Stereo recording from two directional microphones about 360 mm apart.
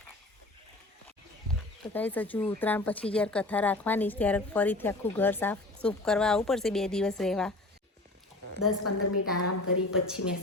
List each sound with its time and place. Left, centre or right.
1.8 s speech: centre
8.4 s a woman's voice: left